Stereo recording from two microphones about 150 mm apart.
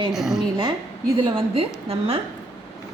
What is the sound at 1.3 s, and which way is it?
Speech, 40° right (ahead or behind).